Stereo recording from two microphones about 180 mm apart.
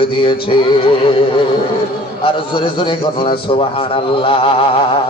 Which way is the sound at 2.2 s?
30° left (ahead or behind).